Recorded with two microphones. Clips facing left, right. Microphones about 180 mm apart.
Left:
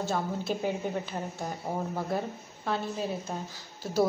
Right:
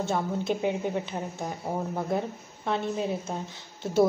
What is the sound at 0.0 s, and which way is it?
Speech, 20° right (ahead or behind).